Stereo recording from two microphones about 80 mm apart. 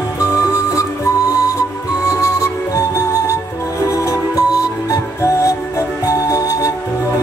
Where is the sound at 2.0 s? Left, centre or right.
Left.